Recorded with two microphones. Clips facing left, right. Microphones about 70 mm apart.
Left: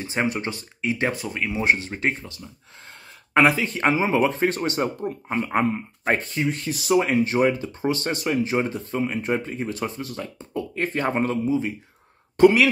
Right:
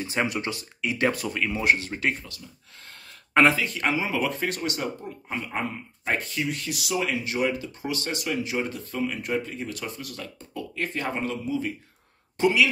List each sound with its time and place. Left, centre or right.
0.0 s speech: left
3.5 s speech: left
5.0 s speech: left
6.1 s speech: left
12.4 s speech: left